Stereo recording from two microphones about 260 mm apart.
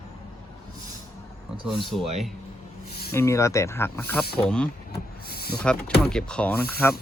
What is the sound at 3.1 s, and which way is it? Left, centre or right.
Speech, centre.